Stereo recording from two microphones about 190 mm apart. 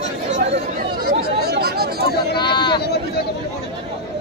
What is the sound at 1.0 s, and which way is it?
Chatter, 55° right (ahead or behind).